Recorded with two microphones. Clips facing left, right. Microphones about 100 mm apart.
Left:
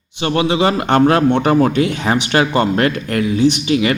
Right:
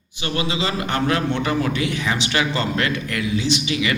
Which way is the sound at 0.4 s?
60° left (ahead or behind).